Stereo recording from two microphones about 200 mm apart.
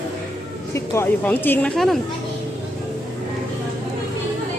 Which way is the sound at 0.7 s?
10° left (ahead or behind).